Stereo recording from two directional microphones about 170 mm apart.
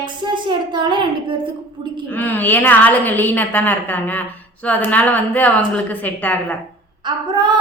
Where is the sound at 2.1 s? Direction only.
10° left (ahead or behind).